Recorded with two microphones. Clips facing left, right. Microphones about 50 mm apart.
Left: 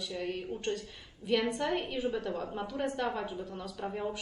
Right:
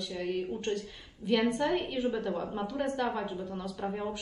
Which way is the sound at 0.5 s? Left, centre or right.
Centre.